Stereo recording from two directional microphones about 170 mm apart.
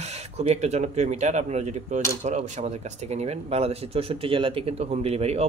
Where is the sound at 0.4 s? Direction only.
40° right (ahead or behind).